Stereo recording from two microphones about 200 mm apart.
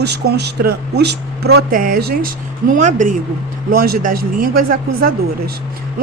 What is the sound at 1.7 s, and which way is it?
Speech, 45° right (ahead or behind).